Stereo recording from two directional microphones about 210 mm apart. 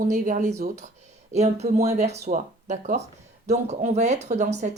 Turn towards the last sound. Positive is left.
turn(degrees=-35)  # may be behind; listen again after turning